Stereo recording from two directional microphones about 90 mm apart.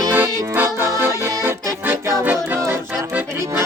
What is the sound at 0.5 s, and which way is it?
Music, 25° right (ahead or behind).